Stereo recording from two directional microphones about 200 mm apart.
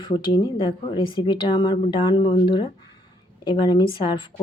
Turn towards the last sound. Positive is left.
turn(degrees=25)  # may be behind; listen again after turning